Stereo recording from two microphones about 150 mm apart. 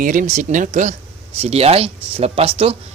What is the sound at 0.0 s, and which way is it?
Speech, 65° right (ahead or behind).